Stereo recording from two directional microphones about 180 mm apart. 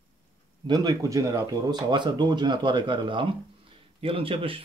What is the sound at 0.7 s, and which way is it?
Speech, 25° right (ahead or behind).